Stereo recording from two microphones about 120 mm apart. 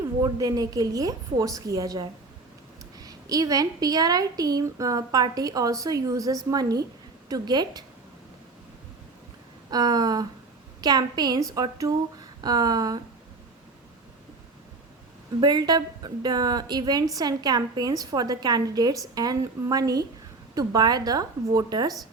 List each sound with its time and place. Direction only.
0.2 s a woman's voice: 30° right (ahead or behind)
9.6 s a woman's voice: 35° right (ahead or behind)
15.4 s a woman's voice: 35° right (ahead or behind)